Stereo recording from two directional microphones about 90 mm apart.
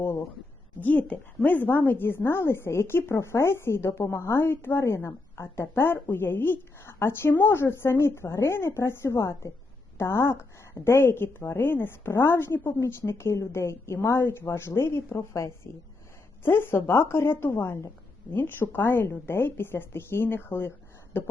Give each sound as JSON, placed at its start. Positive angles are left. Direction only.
{"t": 0.8, "sound": "a woman's voice", "side_deg": 20}